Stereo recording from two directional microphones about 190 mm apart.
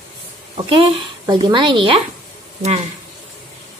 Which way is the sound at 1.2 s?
25° right (ahead or behind).